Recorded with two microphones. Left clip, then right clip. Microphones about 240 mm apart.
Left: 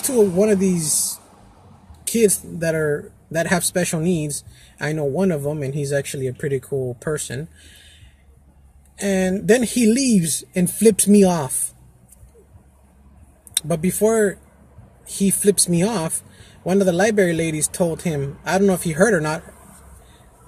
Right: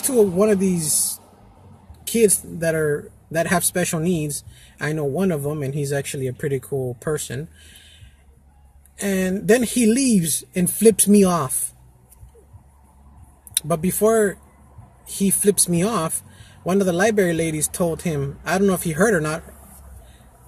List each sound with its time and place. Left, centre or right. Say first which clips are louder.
0.0 s speech: even; centre
2.1 s speech: even; centre
13.6 s speech: left 1 dB; centre